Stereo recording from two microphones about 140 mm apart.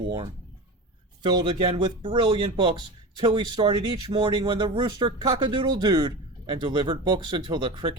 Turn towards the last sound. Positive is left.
turn(degrees=-30)  # may be behind; listen again after turning